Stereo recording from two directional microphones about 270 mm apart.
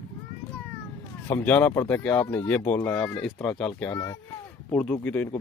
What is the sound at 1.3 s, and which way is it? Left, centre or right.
Speech, centre.